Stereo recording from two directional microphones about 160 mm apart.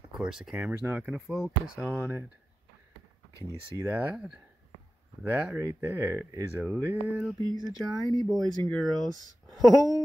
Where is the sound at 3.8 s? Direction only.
10° right (ahead or behind).